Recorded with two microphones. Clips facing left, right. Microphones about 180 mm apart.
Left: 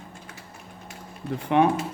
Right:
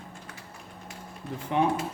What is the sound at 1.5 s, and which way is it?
Speech, 70° left (ahead or behind).